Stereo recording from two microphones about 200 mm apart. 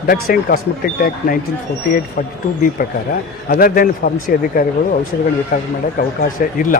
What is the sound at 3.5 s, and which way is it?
A man's voice, 45° left (ahead or behind).